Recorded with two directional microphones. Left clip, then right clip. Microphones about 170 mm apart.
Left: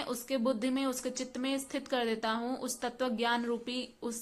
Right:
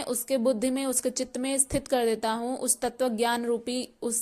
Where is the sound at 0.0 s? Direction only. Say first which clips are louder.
Right 7 dB; 40° right (ahead or behind).